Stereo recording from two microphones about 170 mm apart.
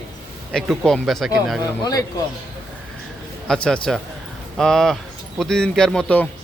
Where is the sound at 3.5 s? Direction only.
5° left (ahead or behind).